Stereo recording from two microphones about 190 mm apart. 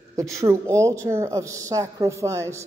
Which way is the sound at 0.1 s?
15° right (ahead or behind).